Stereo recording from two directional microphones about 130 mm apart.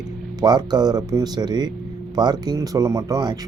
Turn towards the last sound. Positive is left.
turn(degrees=-30)  # may be behind; listen again after turning